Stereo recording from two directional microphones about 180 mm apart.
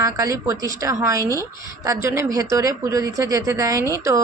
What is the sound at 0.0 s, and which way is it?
A woman's voice, 20° right (ahead or behind).